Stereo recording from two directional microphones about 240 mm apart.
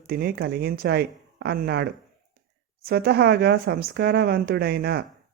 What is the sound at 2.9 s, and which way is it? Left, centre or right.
Speech, right.